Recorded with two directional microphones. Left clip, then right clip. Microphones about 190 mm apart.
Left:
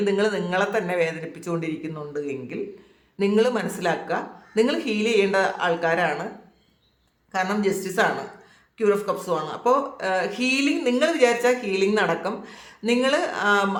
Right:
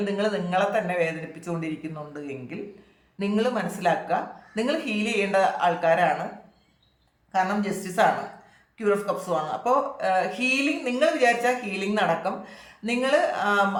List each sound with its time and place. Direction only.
0.0 s speech: 30° left (ahead or behind)
7.3 s speech: 25° left (ahead or behind)